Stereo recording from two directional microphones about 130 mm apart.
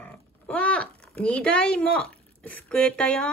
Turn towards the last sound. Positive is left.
turn(degrees=10)  # may be behind; listen again after turning